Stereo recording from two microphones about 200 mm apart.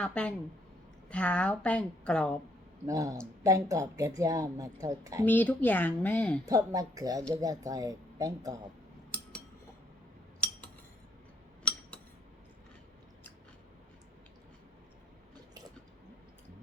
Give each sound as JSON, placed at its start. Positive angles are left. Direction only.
{"t": 0.0, "sound": "a woman's voice", "side_deg": 5}
{"t": 2.8, "sound": "a woman's voice", "side_deg": -15}
{"t": 5.2, "sound": "speech", "side_deg": 10}
{"t": 6.4, "sound": "a woman's voice", "side_deg": -15}
{"t": 11.7, "sound": "a sound", "side_deg": 5}